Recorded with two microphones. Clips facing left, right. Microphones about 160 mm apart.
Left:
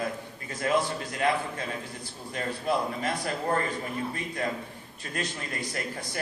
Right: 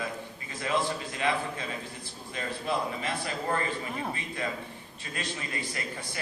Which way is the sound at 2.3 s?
50° left (ahead or behind).